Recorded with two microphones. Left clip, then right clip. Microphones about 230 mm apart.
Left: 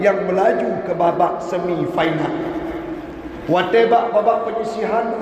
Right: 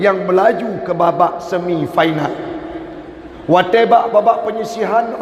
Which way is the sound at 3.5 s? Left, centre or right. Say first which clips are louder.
Right 4 dB; right.